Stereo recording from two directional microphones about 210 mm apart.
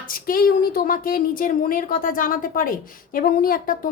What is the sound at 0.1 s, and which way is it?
A woman's voice, 40° left (ahead or behind).